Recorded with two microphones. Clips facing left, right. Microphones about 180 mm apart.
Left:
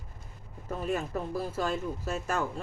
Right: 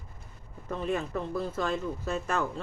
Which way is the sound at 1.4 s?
10° left (ahead or behind).